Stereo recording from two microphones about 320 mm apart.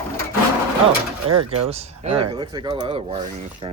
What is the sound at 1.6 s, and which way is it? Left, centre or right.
Speech, centre.